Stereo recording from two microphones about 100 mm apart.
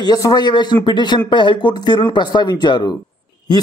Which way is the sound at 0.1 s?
40° left (ahead or behind).